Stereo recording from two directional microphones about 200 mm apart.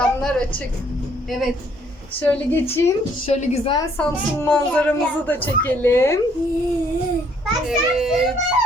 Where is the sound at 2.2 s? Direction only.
5° left (ahead or behind).